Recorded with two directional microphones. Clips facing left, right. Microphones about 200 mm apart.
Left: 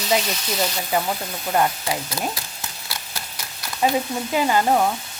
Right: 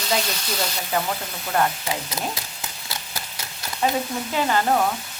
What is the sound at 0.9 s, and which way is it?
Stir, 15° left (ahead or behind).